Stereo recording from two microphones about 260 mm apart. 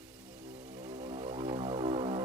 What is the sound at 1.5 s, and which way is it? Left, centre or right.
Music, right.